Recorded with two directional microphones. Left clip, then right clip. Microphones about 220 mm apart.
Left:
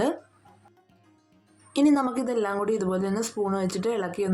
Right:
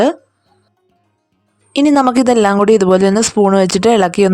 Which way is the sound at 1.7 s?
40° right (ahead or behind).